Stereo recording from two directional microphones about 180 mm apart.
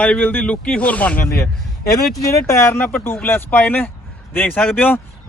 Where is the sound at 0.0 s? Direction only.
10° left (ahead or behind).